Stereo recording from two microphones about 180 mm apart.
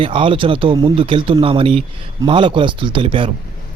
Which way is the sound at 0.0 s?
30° right (ahead or behind).